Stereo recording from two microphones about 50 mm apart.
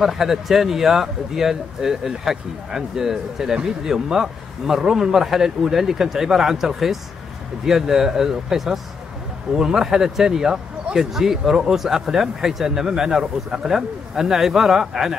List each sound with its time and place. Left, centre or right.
0.0 s speech: centre